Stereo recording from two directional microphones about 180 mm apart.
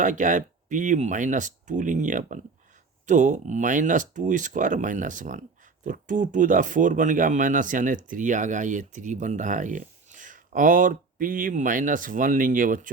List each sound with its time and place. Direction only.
0.0 s speech: 45° right (ahead or behind)